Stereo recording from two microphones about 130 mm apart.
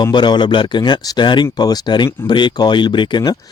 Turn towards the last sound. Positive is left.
turn(degrees=35)  # may be behind; listen again after turning